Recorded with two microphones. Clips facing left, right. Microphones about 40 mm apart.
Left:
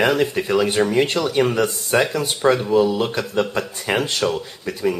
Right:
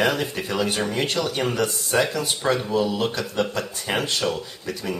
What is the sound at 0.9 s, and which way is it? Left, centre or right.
Speech, left.